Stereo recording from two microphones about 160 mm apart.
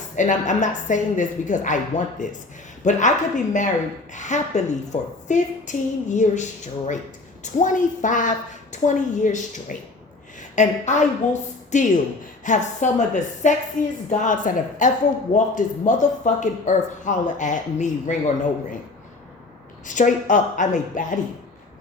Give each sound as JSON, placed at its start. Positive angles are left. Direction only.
{"t": 0.2, "sound": "a woman's voice", "side_deg": 50}
{"t": 19.9, "sound": "speech", "side_deg": 50}